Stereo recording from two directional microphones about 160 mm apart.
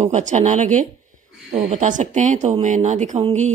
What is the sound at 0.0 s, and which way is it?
A woman's voice, 45° right (ahead or behind).